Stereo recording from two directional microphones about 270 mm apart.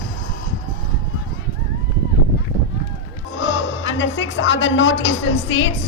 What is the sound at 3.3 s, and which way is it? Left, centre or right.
Music, left.